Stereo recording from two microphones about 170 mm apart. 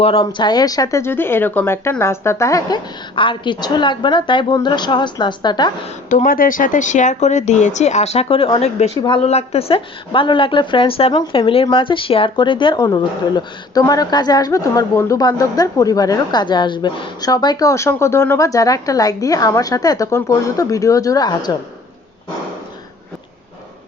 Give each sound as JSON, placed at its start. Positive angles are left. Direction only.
{"t": 0.0, "sound": "a woman's voice", "side_deg": 35}
{"t": 6.1, "sound": "speech", "side_deg": 50}
{"t": 9.0, "sound": "a woman's voice", "side_deg": 25}
{"t": 9.2, "sound": "a woman's voice", "side_deg": 40}